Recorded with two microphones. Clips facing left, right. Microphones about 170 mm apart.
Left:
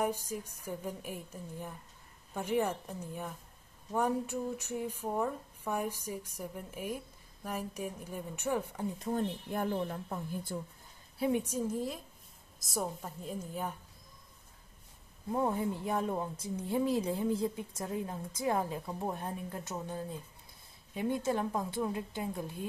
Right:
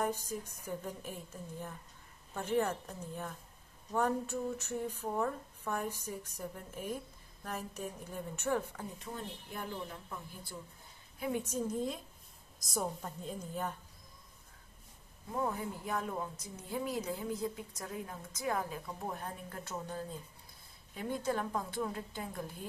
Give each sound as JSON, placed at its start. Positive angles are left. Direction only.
{"t": 0.0, "sound": "a woman's voice", "side_deg": 10}
{"t": 8.9, "sound": "speech", "side_deg": 40}
{"t": 11.3, "sound": "a woman's voice", "side_deg": 10}
{"t": 15.3, "sound": "a woman's voice", "side_deg": 25}